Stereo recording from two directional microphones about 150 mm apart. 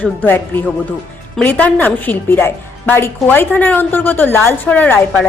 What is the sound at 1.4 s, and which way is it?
A woman's voice, 10° left (ahead or behind).